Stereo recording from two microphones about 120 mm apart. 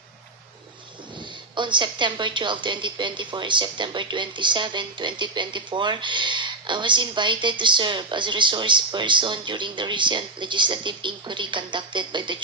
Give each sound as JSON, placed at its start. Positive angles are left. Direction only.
{"t": 1.5, "sound": "a woman's voice", "side_deg": -40}